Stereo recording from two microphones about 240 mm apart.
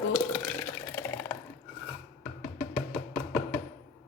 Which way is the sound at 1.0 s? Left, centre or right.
Centre.